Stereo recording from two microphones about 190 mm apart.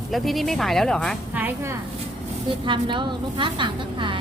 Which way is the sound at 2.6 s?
25° right (ahead or behind).